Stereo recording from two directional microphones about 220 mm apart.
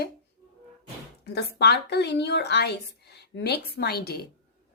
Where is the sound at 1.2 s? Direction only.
50° left (ahead or behind).